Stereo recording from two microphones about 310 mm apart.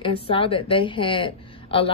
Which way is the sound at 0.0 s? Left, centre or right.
Centre.